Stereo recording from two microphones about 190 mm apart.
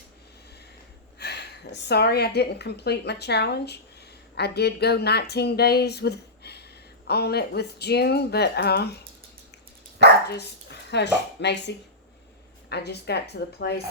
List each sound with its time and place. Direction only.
1.2 s a woman's voice: 60° left (ahead or behind)
10.2 s a woman's voice: 60° left (ahead or behind)